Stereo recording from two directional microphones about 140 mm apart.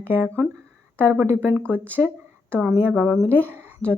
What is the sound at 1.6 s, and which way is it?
Speech, 10° left (ahead or behind).